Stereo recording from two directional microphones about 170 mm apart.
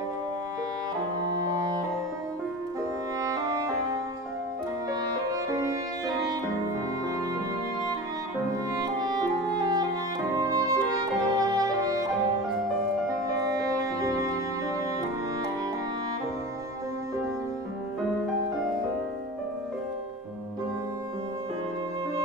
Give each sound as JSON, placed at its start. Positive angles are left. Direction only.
{"t": 1.2, "sound": "music", "side_deg": -25}
{"t": 3.2, "sound": "music", "side_deg": -20}
{"t": 9.0, "sound": "clarinet", "side_deg": -25}
{"t": 10.3, "sound": "music", "side_deg": -20}
{"t": 13.5, "sound": "music", "side_deg": -20}